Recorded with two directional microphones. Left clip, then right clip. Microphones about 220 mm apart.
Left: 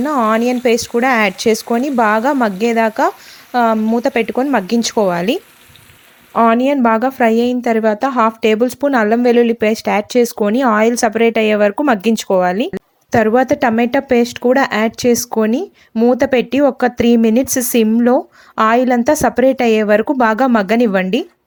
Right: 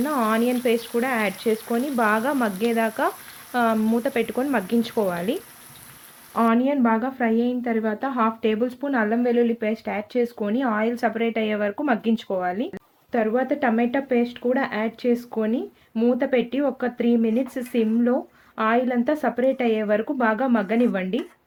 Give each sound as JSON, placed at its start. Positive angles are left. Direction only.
{"t": 0.0, "sound": "a woman's voice", "side_deg": 30}